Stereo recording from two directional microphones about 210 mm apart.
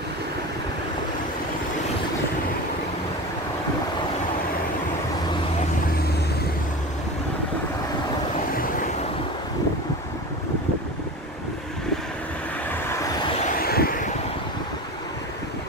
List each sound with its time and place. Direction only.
13.6 s vehicle: 45° left (ahead or behind)